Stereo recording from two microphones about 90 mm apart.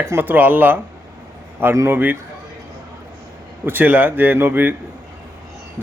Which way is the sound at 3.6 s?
20° right (ahead or behind).